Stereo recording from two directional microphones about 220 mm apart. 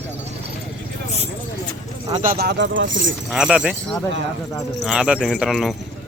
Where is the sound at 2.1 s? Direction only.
40° right (ahead or behind); by 3.1 s 55° right (ahead or behind).